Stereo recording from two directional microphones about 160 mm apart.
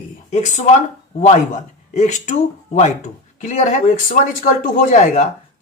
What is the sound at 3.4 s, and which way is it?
Speech, 45° left (ahead or behind).